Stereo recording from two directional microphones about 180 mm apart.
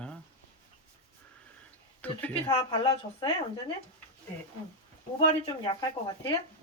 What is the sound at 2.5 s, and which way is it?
A woman's voice, 25° left (ahead or behind).